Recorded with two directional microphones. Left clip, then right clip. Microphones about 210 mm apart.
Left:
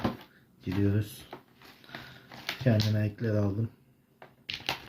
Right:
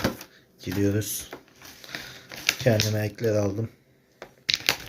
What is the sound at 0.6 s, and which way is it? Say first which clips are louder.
Speech: right 5 dB; 5° left (ahead or behind).